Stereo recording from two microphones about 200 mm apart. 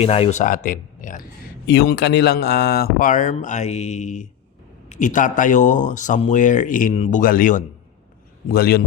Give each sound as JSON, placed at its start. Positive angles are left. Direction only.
{"t": 0.0, "sound": "speech", "side_deg": 30}
{"t": 1.6, "sound": "speech", "side_deg": 55}